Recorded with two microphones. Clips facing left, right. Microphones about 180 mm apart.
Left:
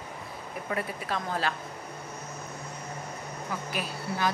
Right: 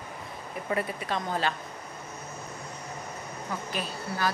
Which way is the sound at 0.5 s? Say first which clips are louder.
Right 3 dB; centre (ahead or behind).